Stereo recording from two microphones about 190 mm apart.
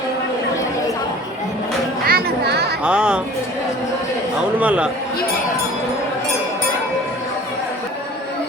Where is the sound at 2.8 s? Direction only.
5° right (ahead or behind).